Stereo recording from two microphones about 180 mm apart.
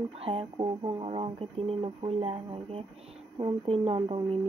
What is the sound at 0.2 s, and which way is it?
Speech, 30° right (ahead or behind).